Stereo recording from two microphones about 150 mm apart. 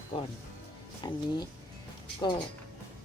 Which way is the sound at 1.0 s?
30° left (ahead or behind).